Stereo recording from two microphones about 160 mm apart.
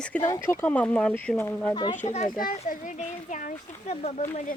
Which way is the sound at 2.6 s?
55° left (ahead or behind).